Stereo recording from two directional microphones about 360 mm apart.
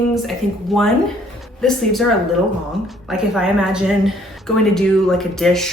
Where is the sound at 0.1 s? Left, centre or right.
Centre.